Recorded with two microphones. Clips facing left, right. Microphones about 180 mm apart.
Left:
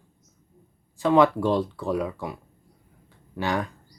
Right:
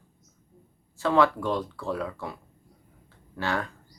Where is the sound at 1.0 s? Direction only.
20° left (ahead or behind).